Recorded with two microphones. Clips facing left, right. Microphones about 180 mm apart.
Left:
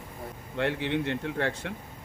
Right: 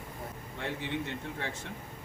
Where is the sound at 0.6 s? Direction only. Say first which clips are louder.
Left 8 dB; 80° left.